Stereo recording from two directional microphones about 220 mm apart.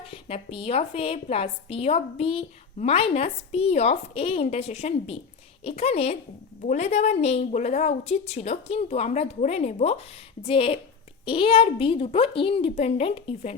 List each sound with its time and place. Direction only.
0.0 s a woman's voice: 25° left (ahead or behind)